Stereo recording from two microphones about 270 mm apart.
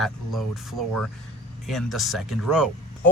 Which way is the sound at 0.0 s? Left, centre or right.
Centre.